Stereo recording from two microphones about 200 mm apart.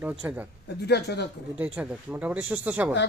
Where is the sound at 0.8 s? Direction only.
55° left (ahead or behind).